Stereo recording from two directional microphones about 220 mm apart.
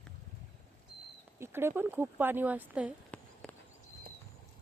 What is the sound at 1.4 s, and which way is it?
Speech, 10° right (ahead or behind).